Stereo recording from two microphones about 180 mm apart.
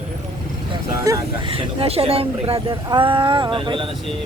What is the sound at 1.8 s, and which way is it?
Speech, 30° right (ahead or behind).